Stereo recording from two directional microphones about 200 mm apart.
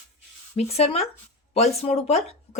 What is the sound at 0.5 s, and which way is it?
Speech, 30° left (ahead or behind).